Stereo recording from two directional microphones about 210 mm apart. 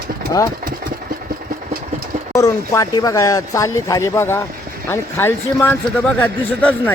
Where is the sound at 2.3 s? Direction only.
15° left (ahead or behind).